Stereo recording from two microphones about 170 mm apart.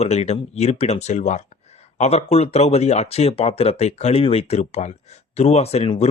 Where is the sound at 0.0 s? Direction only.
40° left (ahead or behind).